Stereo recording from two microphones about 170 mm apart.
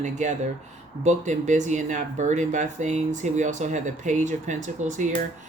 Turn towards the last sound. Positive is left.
turn(degrees=-50)  # may be behind; listen again after turning